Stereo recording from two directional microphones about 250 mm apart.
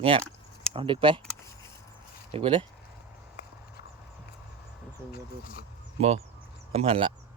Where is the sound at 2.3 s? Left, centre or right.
Right.